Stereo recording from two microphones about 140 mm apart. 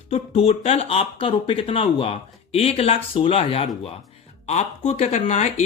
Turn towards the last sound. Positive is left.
turn(degrees=55)  # may be behind; listen again after turning